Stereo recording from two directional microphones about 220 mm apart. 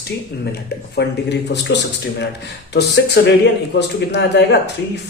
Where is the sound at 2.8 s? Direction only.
50° left (ahead or behind).